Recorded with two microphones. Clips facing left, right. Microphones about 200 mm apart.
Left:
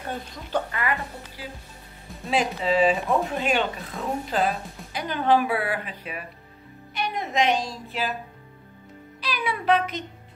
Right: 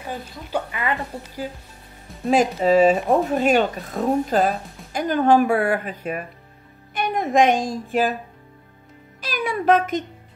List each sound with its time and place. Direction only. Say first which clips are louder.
0.0 s speech: right 1 dB; 10° right (ahead or behind)
1.1 s a woman's voice: right 8 dB; 40° right (ahead or behind)
9.2 s a sound: right 5 dB; 45° right (ahead or behind)